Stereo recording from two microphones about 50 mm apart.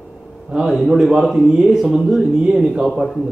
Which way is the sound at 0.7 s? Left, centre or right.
Centre.